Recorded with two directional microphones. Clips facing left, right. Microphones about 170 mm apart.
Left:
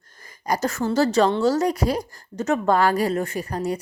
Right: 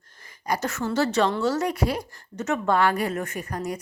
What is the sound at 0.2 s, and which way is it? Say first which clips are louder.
A woman's voice: left 3 dB; 40° left (ahead or behind).